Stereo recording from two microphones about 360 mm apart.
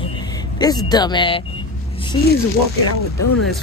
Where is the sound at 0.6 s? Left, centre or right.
Centre.